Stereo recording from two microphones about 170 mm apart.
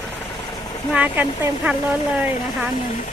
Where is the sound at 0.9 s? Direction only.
10° right (ahead or behind).